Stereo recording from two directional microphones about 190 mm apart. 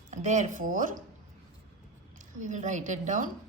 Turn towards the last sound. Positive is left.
turn(degrees=-40)  # may be behind; listen again after turning